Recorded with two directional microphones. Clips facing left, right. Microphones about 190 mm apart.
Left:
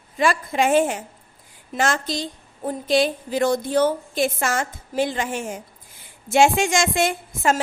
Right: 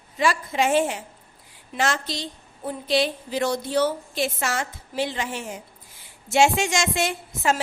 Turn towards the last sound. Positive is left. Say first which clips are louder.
# left 2 dB
turn(degrees=50)  # may be behind; listen again after turning